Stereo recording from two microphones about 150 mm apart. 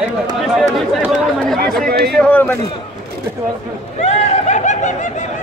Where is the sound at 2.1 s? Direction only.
10° left (ahead or behind).